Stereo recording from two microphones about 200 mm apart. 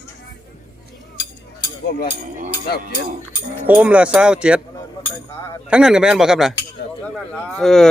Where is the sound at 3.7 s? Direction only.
5° right (ahead or behind).